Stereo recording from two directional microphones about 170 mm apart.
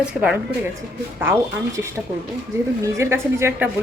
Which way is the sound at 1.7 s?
15° right (ahead or behind).